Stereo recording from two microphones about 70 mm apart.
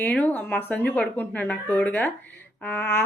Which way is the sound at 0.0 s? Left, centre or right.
Left.